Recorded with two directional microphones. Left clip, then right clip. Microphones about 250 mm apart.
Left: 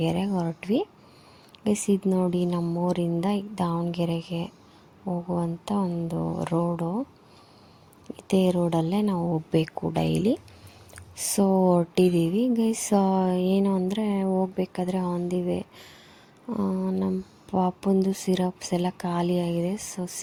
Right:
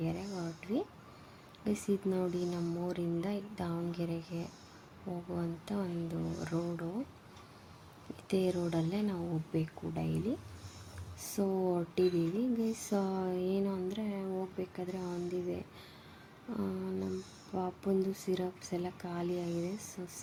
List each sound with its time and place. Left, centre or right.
0.0 s speech: left
8.3 s speech: left